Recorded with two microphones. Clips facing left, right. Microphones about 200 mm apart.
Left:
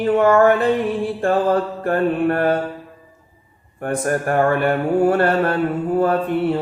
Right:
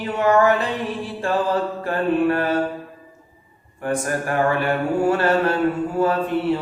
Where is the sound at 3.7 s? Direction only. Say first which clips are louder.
Left 2 dB; 50° left (ahead or behind).